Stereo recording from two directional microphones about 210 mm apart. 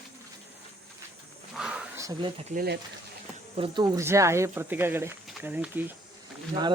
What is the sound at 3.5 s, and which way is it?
Speech, 25° right (ahead or behind).